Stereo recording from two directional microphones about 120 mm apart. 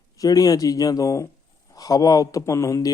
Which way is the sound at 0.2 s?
30° left (ahead or behind).